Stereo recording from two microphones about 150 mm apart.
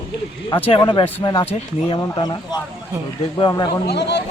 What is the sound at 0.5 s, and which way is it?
Speech, 35° left (ahead or behind).